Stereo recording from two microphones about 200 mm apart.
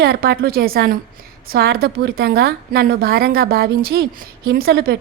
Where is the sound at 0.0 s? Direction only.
55° right (ahead or behind).